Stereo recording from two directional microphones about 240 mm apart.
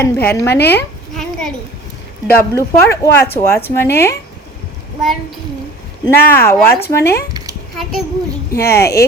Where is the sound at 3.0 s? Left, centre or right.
Centre.